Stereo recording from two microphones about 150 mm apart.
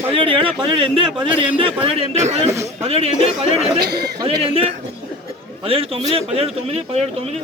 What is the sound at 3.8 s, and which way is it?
Speech, 90° right.